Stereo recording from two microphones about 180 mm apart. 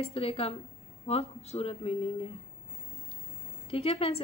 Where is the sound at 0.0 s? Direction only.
30° left (ahead or behind).